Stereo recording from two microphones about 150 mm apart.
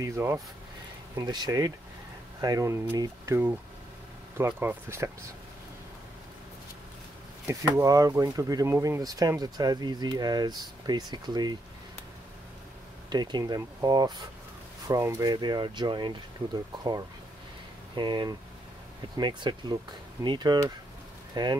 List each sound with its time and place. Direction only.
0.0 s speech: 20° right (ahead or behind)
7.4 s speech: 20° right (ahead or behind)
13.1 s speech: 30° right (ahead or behind)
17.9 s speech: 30° right (ahead or behind)